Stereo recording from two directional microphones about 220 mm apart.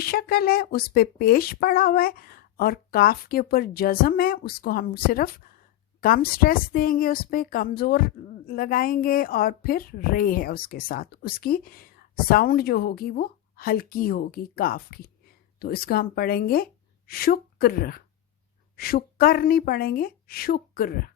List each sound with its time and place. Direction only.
0.0 s a woman's voice: 45° left (ahead or behind)